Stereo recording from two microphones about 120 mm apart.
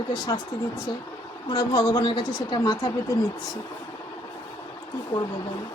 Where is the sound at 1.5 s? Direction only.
35° left (ahead or behind).